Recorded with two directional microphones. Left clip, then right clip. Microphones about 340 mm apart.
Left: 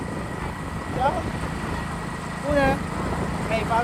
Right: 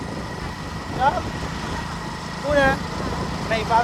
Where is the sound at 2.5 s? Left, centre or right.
Centre.